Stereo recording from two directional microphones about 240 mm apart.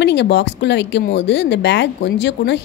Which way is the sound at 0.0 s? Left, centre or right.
Left.